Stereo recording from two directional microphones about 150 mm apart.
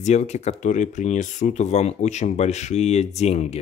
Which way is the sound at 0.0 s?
50° left (ahead or behind).